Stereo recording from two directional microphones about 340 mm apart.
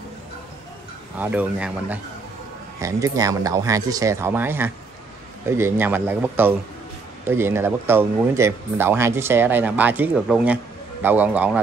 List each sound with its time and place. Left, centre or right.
1.1 s speech: centre